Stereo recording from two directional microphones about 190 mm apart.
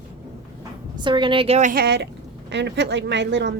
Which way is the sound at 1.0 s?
25° right (ahead or behind).